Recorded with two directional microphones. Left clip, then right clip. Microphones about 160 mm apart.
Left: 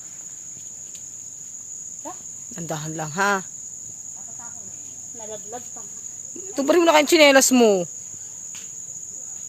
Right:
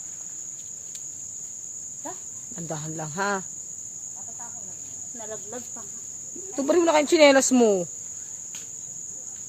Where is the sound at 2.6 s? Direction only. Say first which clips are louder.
Left 4 dB; 30° left (ahead or behind).